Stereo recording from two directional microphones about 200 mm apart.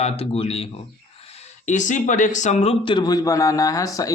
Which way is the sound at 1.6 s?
40° left (ahead or behind).